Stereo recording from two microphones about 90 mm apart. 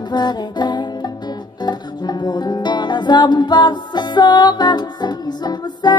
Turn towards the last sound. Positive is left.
turn(degrees=50)  # may be behind; listen again after turning